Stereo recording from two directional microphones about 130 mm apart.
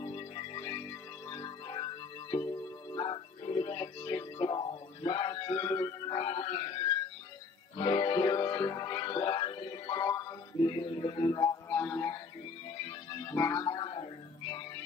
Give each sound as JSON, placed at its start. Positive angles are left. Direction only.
{"t": 0.0, "sound": "music", "side_deg": 40}
{"t": 10.7, "sound": "music", "side_deg": 40}
{"t": 11.7, "sound": "music", "side_deg": 15}
{"t": 13.2, "sound": "music", "side_deg": 25}
{"t": 13.7, "sound": "a sound", "side_deg": 40}